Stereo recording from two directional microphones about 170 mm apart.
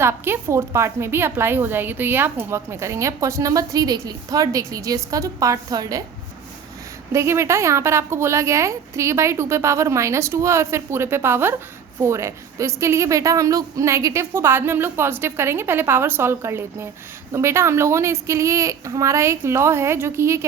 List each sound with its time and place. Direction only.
0.0 s a woman's voice: 15° right (ahead or behind)
7.1 s a woman's voice: 15° right (ahead or behind)